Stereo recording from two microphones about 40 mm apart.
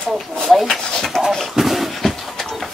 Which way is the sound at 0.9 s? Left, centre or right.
Centre.